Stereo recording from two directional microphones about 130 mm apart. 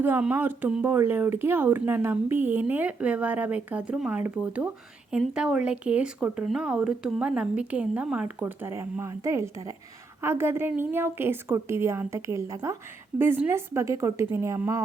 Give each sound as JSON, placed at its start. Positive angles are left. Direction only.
{"t": 0.0, "sound": "a woman's voice", "side_deg": -10}